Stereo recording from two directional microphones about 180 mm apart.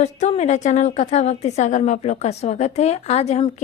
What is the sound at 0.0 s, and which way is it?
A woman's voice, 40° left (ahead or behind).